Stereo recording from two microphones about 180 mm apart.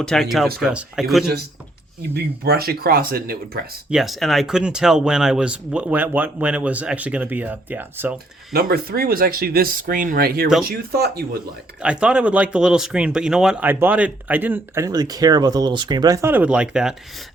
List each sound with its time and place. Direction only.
0.0 s speech: centre (ahead or behind)
2.0 s speech: 60° right (ahead or behind)
3.8 s speech: centre (ahead or behind)
8.5 s speech: 55° right (ahead or behind)
11.8 s speech: 5° right (ahead or behind)